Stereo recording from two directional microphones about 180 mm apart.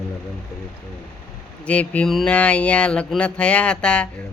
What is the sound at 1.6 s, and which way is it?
Speech, 5° left (ahead or behind).